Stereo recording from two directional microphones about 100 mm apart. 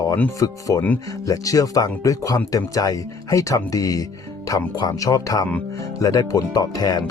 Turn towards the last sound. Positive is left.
turn(degrees=40)  # may be behind; listen again after turning